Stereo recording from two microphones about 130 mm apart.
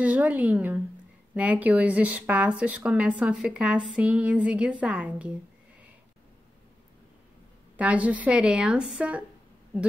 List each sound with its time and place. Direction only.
0.0 s a woman's voice: 10° right (ahead or behind)
7.7 s a woman's voice: 10° right (ahead or behind)